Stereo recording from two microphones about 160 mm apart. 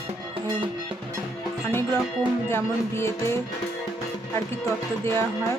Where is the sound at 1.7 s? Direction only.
15° left (ahead or behind).